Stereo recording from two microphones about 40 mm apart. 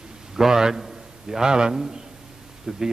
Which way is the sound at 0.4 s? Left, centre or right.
Centre.